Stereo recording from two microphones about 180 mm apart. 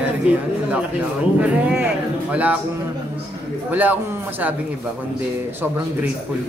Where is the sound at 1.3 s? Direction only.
5° right (ahead or behind).